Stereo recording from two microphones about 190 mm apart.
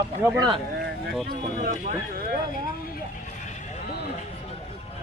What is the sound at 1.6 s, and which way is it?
Speech, 45° right (ahead or behind).